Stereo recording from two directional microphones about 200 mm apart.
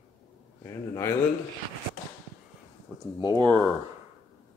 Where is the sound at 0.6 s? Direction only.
15° left (ahead or behind).